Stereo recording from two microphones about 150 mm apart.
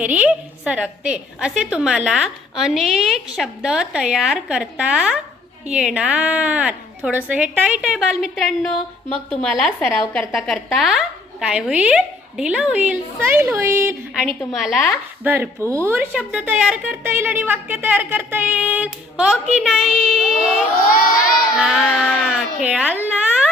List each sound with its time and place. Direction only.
0.0 s a woman's voice: 10° right (ahead or behind)
14.5 s a woman's voice: centre (ahead or behind)
15.2 s a woman's voice: 15° right (ahead or behind)
20.9 s children shouting: 70° left (ahead or behind)
21.6 s a woman's voice: centre (ahead or behind)
22.3 s speech: 5° right (ahead or behind)